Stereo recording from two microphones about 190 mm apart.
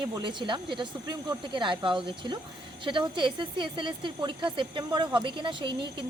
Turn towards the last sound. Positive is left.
turn(degrees=-25)  # may be behind; listen again after turning